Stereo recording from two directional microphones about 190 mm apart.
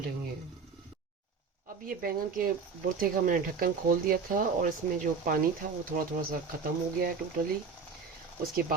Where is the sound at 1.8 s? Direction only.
50° right (ahead or behind).